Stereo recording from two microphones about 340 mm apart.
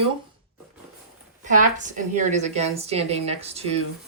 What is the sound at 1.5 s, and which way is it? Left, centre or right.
A woman's voice, right.